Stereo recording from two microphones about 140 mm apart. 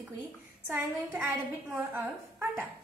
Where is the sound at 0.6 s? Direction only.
10° right (ahead or behind).